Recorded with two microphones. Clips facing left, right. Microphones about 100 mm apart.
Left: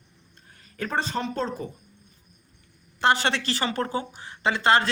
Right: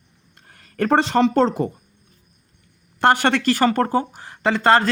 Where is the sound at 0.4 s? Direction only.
70° right (ahead or behind).